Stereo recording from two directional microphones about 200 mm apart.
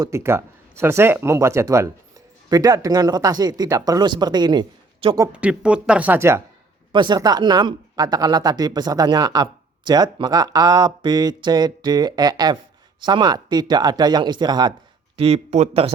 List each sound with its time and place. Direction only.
0.0 s speech: 15° right (ahead or behind)
5.3 s speech: 5° right (ahead or behind)
15.2 s speech: 30° right (ahead or behind)